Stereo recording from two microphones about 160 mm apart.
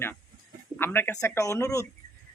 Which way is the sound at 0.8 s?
15° left (ahead or behind).